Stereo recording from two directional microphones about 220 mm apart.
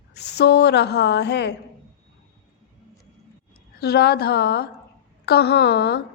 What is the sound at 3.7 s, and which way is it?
A woman's voice, 45° left (ahead or behind).